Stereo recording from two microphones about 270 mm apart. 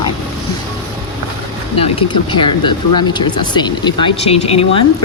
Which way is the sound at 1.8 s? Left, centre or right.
Centre.